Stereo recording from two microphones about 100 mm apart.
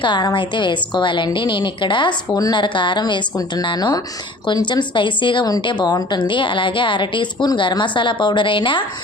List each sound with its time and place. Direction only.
0.0 s a woman's voice: 50° left (ahead or behind)